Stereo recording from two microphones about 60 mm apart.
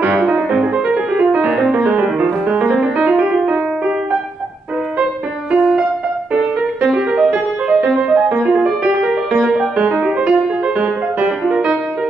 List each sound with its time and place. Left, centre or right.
0.2 s music: centre
5.5 s music: centre
9.1 s music: centre